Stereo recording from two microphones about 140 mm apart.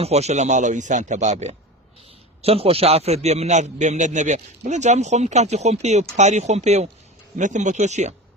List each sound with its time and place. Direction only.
0.0 s a man's voice: 50° right (ahead or behind)